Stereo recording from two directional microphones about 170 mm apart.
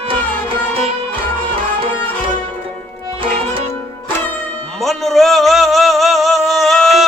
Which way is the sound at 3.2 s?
30° right (ahead or behind).